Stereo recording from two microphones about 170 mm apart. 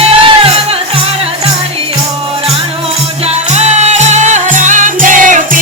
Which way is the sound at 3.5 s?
40° right (ahead or behind).